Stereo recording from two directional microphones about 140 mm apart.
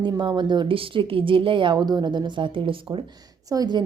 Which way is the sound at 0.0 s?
35° right (ahead or behind).